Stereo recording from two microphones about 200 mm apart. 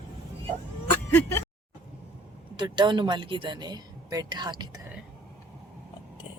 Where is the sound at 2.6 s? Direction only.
25° right (ahead or behind).